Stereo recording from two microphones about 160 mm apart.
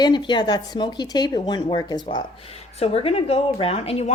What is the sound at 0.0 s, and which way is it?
Speech, 30° left (ahead or behind).